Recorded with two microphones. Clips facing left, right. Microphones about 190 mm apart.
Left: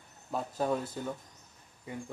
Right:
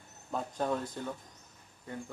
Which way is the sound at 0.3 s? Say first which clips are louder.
Left 2 dB; 5° left (ahead or behind).